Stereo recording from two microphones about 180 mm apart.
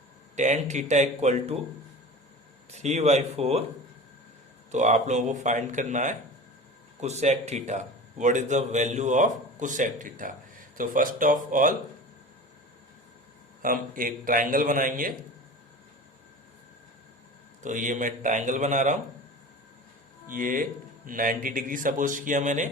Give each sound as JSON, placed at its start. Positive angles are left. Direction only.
{"t": 0.3, "sound": "speech", "side_deg": -40}
{"t": 2.7, "sound": "speech", "side_deg": -40}
{"t": 4.7, "sound": "speech", "side_deg": -40}
{"t": 13.6, "sound": "speech", "side_deg": -50}
{"t": 17.6, "sound": "speech", "side_deg": -45}
{"t": 20.3, "sound": "speech", "side_deg": -50}